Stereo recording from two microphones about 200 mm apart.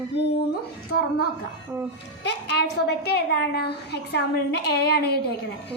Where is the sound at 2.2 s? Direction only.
55° left (ahead or behind).